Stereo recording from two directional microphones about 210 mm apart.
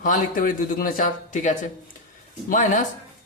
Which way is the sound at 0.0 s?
40° left (ahead or behind).